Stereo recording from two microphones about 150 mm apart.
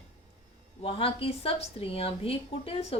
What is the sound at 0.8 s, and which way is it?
A woman's voice, 40° left (ahead or behind).